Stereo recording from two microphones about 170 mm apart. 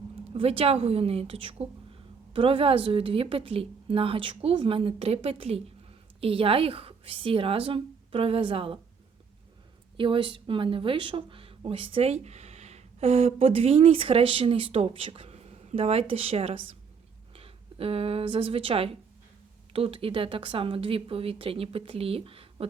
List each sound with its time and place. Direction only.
0.3 s speech: 35° right (ahead or behind)
10.0 s speech: 30° right (ahead or behind)